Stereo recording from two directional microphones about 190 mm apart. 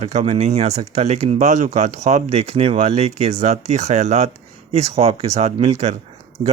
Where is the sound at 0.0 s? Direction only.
40° right (ahead or behind).